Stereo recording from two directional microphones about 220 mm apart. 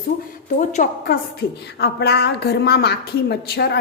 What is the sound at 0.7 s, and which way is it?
A woman's voice, 40° left (ahead or behind).